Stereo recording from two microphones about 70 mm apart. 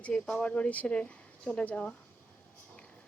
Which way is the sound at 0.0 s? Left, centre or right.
Centre.